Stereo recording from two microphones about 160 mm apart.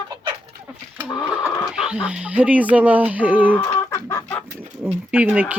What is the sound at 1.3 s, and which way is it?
Speech, 5° right (ahead or behind).